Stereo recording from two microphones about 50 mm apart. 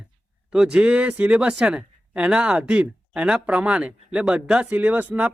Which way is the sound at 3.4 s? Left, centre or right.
Right.